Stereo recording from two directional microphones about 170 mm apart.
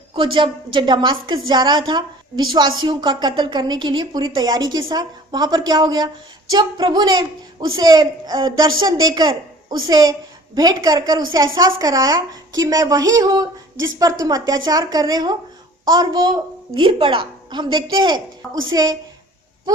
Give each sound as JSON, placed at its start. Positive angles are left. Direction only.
{"t": 0.1, "sound": "a woman's voice", "side_deg": -30}